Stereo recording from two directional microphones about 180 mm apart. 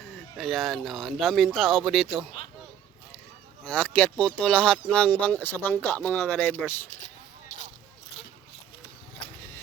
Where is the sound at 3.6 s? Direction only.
5° left (ahead or behind).